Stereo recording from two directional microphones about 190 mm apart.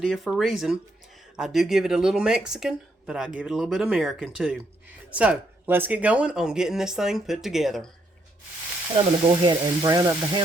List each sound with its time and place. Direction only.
0.0 s speech: centre (ahead or behind)
9.0 s speech: 25° right (ahead or behind)